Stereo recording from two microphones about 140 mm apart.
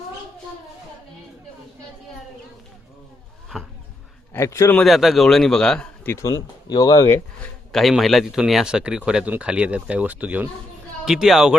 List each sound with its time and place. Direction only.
4.4 s speech: 20° left (ahead or behind)
4.8 s a man's voice: centre (ahead or behind)
6.1 s speech: 20° left (ahead or behind)
7.7 s a man's voice: centre (ahead or behind)